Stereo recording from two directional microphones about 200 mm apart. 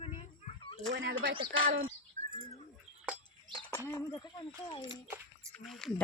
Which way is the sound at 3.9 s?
20° left (ahead or behind).